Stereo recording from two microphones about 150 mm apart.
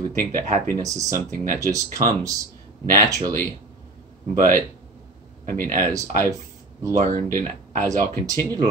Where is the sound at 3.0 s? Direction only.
25° right (ahead or behind).